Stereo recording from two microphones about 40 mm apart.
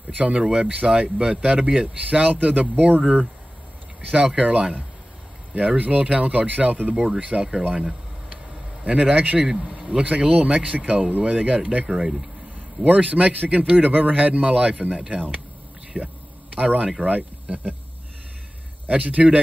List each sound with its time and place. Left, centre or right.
0.1 s speech: right
2.7 s speech: right
4.1 s speech: right
9.4 s speech: centre
10.2 s speech: right
11.9 s speech: centre
12.8 s speech: right
16.0 s speech: right
16.5 s speech: right
18.9 s speech: right